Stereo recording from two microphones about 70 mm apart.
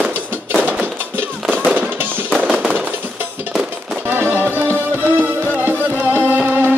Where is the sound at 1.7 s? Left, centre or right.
Right.